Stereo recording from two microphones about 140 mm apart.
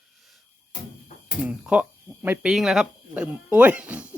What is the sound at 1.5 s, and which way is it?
Speech, 10° right (ahead or behind).